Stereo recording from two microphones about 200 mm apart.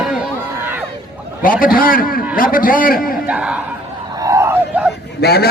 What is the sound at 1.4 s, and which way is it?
A man's voice, 45° left (ahead or behind).